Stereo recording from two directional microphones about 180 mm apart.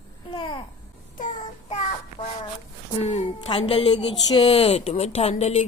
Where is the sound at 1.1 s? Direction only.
40° left (ahead or behind).